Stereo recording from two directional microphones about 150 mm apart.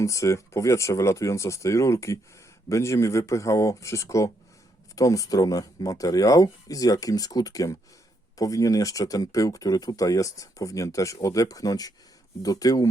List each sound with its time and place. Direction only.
0.0 s speech: 20° left (ahead or behind)